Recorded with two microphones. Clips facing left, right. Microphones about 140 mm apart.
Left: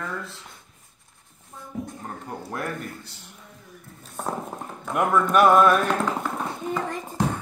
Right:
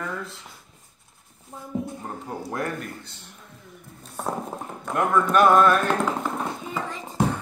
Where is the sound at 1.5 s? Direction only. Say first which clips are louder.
Right 3 dB; 25° right (ahead or behind).